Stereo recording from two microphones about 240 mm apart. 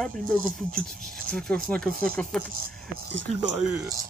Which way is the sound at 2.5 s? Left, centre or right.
Right.